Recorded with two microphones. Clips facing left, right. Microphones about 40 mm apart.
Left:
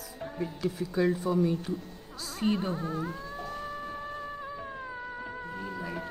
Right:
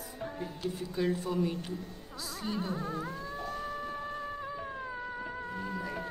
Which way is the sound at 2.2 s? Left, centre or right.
Left.